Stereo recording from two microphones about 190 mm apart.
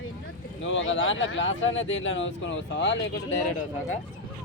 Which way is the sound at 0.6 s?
90° left.